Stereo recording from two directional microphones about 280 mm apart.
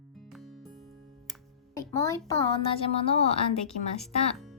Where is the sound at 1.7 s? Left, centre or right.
Centre.